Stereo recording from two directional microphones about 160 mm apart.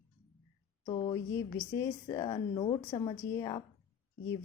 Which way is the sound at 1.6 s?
20° left (ahead or behind).